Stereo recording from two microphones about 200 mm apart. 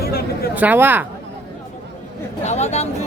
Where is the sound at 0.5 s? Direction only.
10° right (ahead or behind).